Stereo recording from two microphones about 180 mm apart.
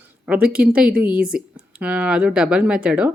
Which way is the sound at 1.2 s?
55° right (ahead or behind).